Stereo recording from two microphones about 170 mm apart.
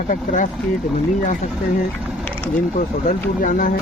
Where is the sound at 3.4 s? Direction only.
55° left (ahead or behind).